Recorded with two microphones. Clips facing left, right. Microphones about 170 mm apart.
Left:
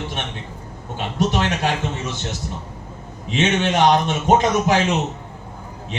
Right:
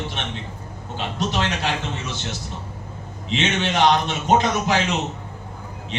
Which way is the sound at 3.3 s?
45° left (ahead or behind).